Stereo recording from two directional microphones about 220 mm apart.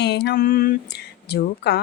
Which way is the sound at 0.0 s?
50° left (ahead or behind).